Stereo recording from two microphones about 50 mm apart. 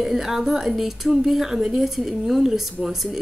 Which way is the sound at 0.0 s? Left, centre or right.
Centre.